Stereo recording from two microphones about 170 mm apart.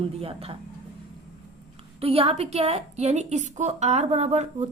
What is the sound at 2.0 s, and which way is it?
A woman's voice, 35° right (ahead or behind).